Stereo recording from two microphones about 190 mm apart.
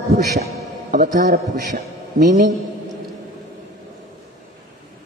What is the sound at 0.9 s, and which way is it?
A man's voice, 40° right (ahead or behind).